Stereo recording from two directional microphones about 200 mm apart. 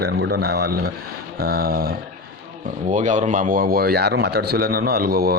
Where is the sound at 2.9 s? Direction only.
40° right (ahead or behind).